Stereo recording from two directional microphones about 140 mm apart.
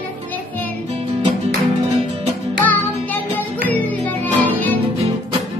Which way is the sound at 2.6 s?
15° left (ahead or behind).